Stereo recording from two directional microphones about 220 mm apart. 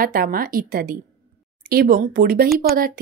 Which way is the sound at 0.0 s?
40° right (ahead or behind).